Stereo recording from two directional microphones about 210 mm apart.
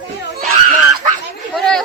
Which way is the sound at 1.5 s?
Centre (ahead or behind).